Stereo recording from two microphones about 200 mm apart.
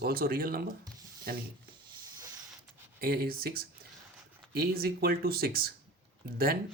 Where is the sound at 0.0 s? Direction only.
50° right (ahead or behind).